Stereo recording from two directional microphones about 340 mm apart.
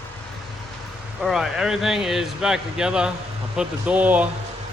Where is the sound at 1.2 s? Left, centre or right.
Centre.